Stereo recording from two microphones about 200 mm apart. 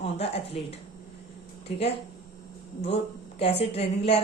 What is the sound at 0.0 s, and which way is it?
Speech, 30° left (ahead or behind).